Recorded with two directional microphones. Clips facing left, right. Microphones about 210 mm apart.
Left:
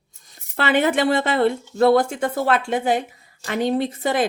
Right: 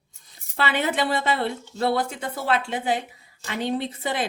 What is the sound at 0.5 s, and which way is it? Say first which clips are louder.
Speech: left 6 dB; 50° left (ahead or behind).